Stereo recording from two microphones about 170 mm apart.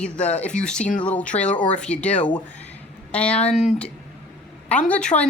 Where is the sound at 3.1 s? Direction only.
5° left (ahead or behind).